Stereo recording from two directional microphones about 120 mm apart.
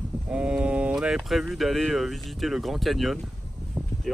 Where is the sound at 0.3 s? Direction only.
10° right (ahead or behind).